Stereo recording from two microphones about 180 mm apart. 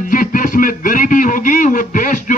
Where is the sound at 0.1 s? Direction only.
50° left (ahead or behind).